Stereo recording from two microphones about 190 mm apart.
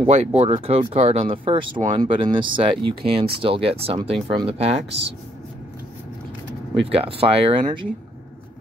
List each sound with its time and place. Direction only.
0.0 s speech: 35° right (ahead or behind)
6.9 s speech: 30° right (ahead or behind)